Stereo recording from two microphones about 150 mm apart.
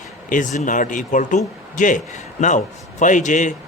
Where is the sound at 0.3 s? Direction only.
60° left (ahead or behind).